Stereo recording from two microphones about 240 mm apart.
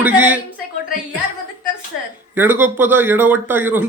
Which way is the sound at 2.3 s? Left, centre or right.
Centre.